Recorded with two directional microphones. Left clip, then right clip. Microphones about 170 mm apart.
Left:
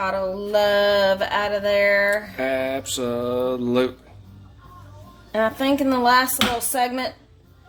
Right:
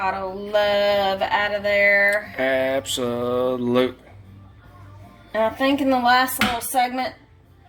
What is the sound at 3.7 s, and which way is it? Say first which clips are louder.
Speech: right 1 dB; 5° left (ahead or behind).